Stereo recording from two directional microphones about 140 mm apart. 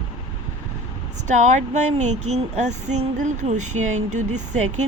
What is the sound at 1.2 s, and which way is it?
Speech, 60° right (ahead or behind).